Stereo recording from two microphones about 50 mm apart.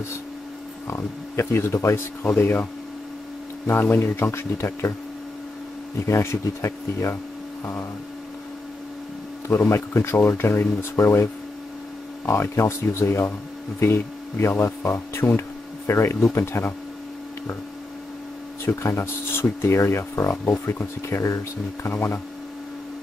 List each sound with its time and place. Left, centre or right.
0.8 s speech: left
2.3 s speech: left
3.8 s speech: left
6.0 s speech: left
9.7 s speech: left
12.3 s speech: left
18.8 s speech: left
21.8 s speech: left